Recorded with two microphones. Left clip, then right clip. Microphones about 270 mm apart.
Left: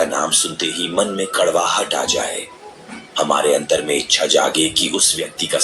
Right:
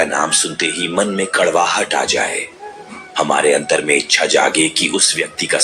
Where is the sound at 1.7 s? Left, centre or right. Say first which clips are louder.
Right 2 dB; right.